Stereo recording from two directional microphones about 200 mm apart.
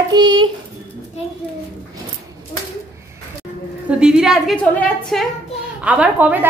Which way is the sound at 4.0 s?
5° right (ahead or behind).